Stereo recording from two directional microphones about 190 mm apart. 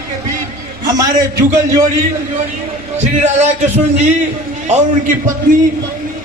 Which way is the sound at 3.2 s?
35° right (ahead or behind).